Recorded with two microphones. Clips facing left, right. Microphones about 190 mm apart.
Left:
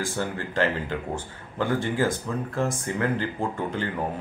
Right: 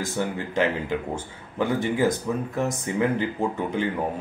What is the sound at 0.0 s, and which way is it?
Speech, 20° right (ahead or behind).